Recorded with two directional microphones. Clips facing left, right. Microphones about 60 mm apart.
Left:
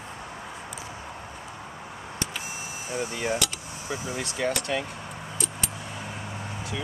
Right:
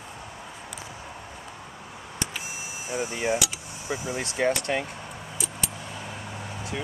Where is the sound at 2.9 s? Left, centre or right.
Centre.